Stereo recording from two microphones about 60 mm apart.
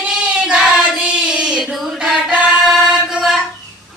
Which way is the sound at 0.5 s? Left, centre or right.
Centre.